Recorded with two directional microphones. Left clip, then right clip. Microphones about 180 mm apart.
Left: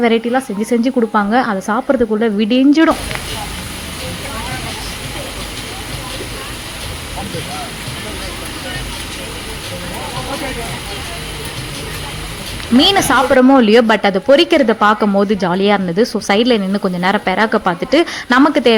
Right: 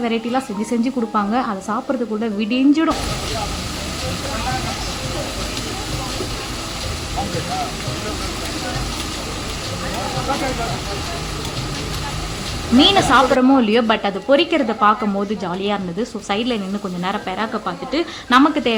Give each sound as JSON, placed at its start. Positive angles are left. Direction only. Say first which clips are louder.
{"t": 0.3, "sound": "a woman's voice", "louder": "left 5 dB", "side_deg": 15}
{"t": 12.8, "sound": "a woman's voice", "louder": "left 1 dB", "side_deg": 25}